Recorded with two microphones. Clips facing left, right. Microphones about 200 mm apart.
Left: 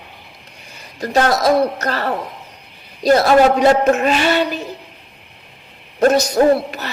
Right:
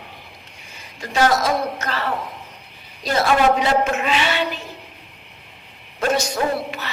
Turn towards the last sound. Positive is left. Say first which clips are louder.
# left 9 dB
turn(degrees=40)  # may be behind; listen again after turning